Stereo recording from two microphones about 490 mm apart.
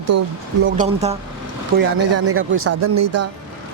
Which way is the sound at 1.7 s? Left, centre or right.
Right.